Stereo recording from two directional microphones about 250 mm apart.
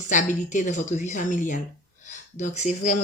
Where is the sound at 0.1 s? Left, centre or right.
Left.